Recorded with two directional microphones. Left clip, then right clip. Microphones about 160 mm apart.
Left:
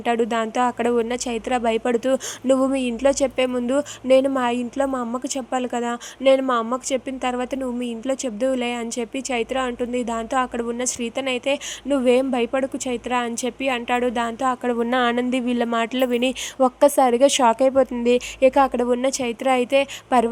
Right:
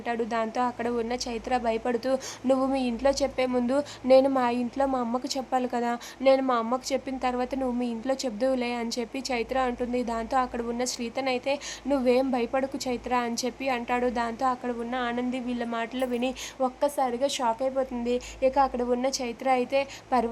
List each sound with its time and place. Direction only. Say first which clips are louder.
0.0 s a woman's voice: left 7 dB; 25° left (ahead or behind)
14.8 s a woman's voice: left 10 dB; 40° left (ahead or behind); by 20.3 s 25° left (ahead or behind)